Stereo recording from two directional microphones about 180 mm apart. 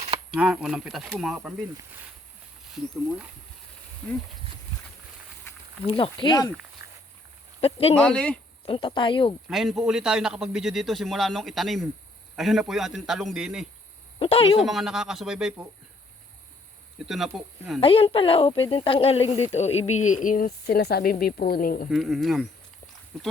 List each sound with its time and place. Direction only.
0.3 s a man's voice: 5° right (ahead or behind)
5.9 s speech: 30° left (ahead or behind)
6.8 s a sound: 15° right (ahead or behind)
7.6 s speech: 35° left (ahead or behind)
7.9 s a man's voice: 5° left (ahead or behind)
8.6 s speech: 30° left (ahead or behind)
9.5 s a man's voice: centre (ahead or behind)
14.2 s speech: 30° left (ahead or behind)
14.6 s a man's voice: centre (ahead or behind)
17.1 s a man's voice: centre (ahead or behind)
17.7 s speech: 30° left (ahead or behind); by 21.8 s 55° left (ahead or behind)
21.8 s a man's voice: centre (ahead or behind)